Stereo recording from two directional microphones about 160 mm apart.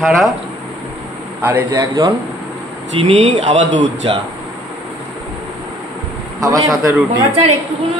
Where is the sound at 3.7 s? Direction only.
45° right (ahead or behind).